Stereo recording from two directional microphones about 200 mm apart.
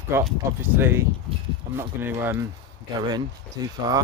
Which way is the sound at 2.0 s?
10° right (ahead or behind).